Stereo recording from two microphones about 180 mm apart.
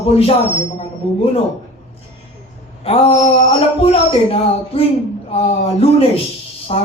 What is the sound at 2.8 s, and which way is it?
A man's voice, 35° left (ahead or behind).